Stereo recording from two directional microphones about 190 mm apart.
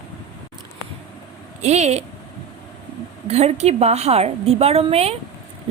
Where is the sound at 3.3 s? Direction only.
35° right (ahead or behind).